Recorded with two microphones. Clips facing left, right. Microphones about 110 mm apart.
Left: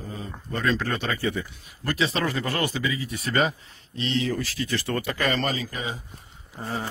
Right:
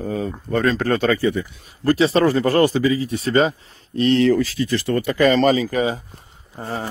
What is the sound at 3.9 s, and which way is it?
Speech, 50° right (ahead or behind).